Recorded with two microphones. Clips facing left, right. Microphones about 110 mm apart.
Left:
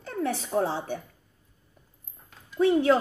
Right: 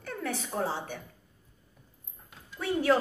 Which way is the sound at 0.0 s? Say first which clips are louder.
Left 5 dB; 30° left (ahead or behind).